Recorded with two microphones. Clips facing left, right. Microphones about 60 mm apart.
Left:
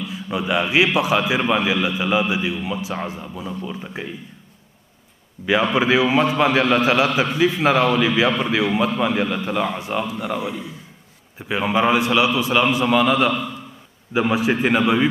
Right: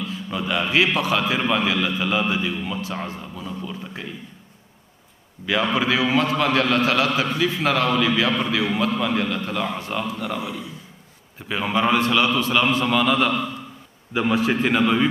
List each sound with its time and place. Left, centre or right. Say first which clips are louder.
0.0 s a man's voice: left 2 dB; centre
5.5 s a man's voice: left 4 dB; centre